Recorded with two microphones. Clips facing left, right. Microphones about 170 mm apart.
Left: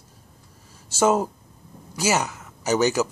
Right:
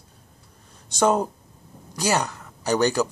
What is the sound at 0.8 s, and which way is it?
Speech, 5° left (ahead or behind).